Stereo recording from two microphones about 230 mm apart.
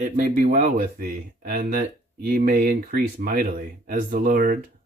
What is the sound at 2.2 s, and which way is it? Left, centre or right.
Speech, right.